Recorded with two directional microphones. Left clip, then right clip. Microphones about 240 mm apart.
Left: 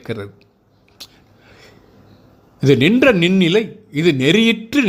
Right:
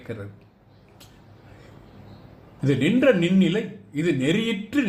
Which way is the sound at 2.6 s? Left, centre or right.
Left.